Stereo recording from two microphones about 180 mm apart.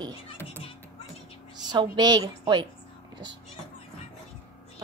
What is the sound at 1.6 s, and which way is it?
A woman's voice, 25° right (ahead or behind).